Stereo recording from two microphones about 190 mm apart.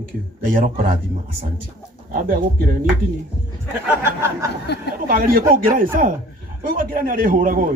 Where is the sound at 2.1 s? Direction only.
50° right (ahead or behind).